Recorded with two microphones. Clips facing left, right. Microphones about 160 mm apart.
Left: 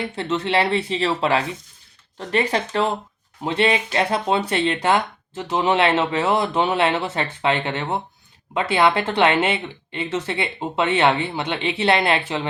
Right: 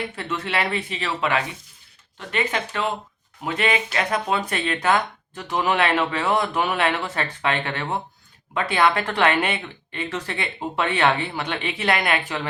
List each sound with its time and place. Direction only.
0.2 s speech: 25° left (ahead or behind)